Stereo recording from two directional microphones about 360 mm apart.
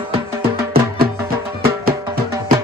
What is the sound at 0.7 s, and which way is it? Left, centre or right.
Music, right.